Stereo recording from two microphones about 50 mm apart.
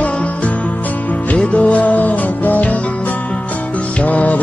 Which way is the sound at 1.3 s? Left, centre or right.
Left.